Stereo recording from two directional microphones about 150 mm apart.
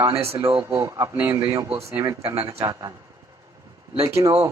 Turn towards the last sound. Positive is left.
turn(degrees=-20)  # may be behind; listen again after turning